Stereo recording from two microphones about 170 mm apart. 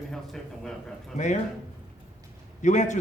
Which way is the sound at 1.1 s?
45° left (ahead or behind).